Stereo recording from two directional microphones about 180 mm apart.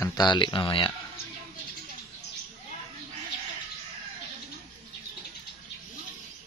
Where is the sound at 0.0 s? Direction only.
20° left (ahead or behind).